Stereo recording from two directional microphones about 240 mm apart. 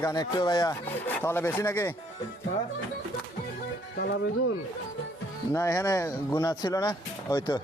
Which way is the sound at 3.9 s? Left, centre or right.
Left.